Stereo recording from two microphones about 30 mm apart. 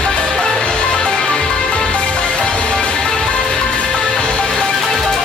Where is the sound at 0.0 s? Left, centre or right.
Left.